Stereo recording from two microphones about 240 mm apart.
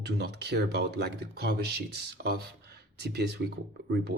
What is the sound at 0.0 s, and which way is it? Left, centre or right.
Speech, right.